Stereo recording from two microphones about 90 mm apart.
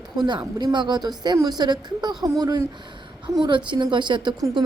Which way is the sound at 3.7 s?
60° right (ahead or behind).